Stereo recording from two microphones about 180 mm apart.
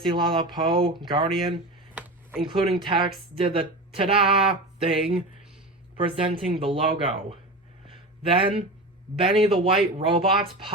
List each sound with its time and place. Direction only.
0.0 s speech: 25° right (ahead or behind)
7.9 s a sound: 30° right (ahead or behind)
9.2 s speech: 30° right (ahead or behind)